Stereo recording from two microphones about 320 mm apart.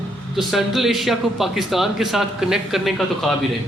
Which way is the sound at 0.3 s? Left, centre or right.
Centre.